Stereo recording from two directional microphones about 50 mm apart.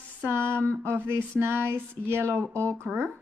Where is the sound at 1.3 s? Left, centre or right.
Right.